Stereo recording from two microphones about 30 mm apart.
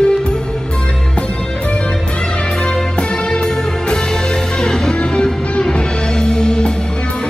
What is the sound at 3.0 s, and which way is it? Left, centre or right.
Music, left.